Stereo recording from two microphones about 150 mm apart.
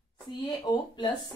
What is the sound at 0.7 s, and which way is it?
Speech, 25° left (ahead or behind).